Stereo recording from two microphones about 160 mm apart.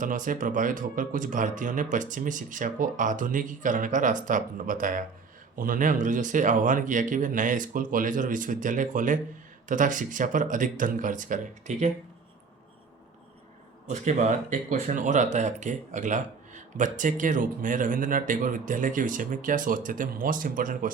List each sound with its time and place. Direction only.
0.0 s speech: 55° right (ahead or behind)
13.9 s speech: 50° right (ahead or behind)